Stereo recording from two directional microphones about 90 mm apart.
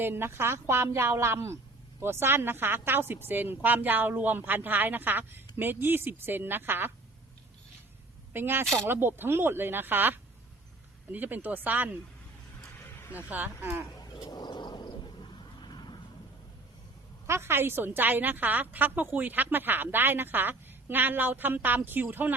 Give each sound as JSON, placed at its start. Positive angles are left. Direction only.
{"t": 0.0, "sound": "a woman's voice", "side_deg": -25}
{"t": 8.3, "sound": "a woman's voice", "side_deg": -25}
{"t": 13.0, "sound": "vehicle", "side_deg": 30}
{"t": 13.3, "sound": "a woman's voice", "side_deg": -20}
{"t": 14.0, "sound": "a sound", "side_deg": 50}
{"t": 17.2, "sound": "a woman's voice", "side_deg": -30}